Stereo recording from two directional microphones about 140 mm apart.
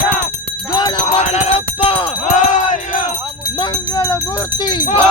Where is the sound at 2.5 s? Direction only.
60° left (ahead or behind).